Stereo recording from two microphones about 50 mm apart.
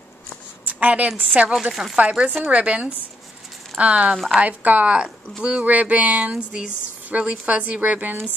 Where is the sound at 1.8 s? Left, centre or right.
Centre.